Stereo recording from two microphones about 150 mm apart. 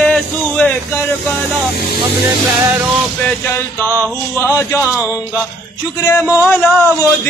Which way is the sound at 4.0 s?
20° right (ahead or behind).